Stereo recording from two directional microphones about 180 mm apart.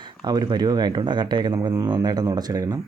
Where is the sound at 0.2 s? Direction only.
25° right (ahead or behind).